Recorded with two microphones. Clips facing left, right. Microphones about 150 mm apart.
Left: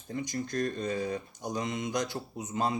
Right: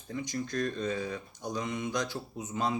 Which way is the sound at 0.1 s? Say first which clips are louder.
Left 1 dB; 50° left (ahead or behind).